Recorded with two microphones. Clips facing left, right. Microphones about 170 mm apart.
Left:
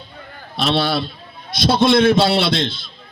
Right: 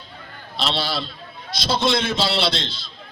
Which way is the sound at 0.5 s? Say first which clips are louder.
Left 6 dB; 55° left (ahead or behind).